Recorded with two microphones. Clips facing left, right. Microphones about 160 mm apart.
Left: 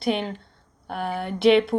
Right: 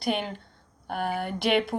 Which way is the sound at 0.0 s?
Centre (ahead or behind).